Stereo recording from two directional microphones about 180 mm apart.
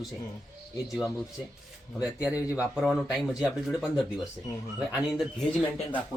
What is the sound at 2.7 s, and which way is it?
Speech, centre (ahead or behind).